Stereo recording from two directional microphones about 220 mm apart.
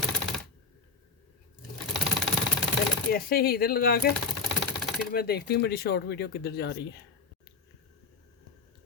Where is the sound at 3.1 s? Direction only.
45° left (ahead or behind).